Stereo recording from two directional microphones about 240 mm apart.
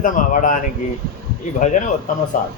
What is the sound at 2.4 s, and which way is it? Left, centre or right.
Speech, left.